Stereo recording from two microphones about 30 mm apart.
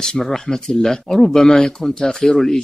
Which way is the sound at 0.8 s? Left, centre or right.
Centre.